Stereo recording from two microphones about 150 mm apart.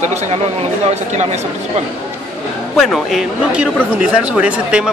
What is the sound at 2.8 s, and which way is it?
Speech, centre (ahead or behind).